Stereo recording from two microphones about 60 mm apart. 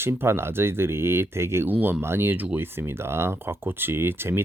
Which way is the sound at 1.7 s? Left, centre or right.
Right.